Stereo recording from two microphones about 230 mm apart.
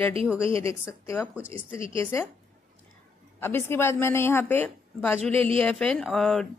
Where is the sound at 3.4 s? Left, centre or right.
Centre.